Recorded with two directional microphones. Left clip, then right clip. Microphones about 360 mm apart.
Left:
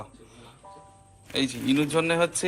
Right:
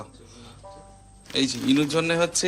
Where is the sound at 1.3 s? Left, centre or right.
Centre.